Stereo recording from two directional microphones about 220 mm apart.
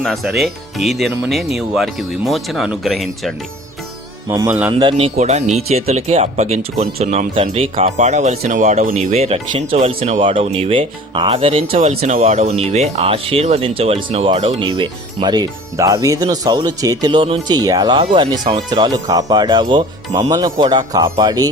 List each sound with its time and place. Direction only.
0.0 s speech: centre (ahead or behind)
4.3 s speech: 10° right (ahead or behind)
4.7 s speech: 20° right (ahead or behind)